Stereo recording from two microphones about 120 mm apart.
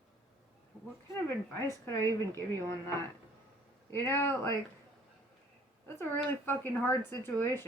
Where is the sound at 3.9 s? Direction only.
20° left (ahead or behind).